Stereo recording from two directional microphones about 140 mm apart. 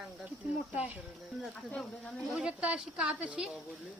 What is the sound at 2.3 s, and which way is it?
Speech, 5° right (ahead or behind).